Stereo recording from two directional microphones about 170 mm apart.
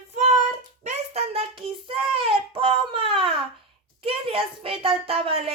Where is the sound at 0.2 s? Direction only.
40° right (ahead or behind).